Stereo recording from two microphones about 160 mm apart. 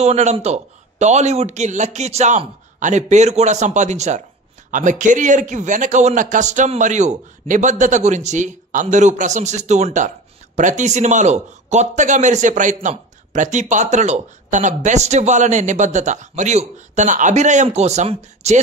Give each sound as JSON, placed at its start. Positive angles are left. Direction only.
{"t": 0.0, "sound": "a man's voice", "side_deg": -45}